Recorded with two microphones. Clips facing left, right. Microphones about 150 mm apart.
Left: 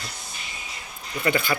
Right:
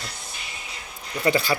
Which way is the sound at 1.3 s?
35° right (ahead or behind).